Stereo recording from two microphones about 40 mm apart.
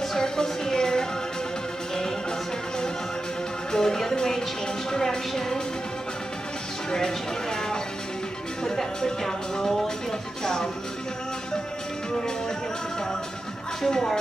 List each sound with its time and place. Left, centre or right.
0.1 s music: centre
3.7 s music: centre
4.9 s a woman's voice: centre
6.9 s a sound: centre
8.6 s a woman's voice: centre
13.8 s a woman's voice: centre